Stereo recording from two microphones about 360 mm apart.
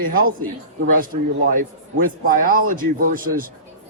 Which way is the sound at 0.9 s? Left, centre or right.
Right.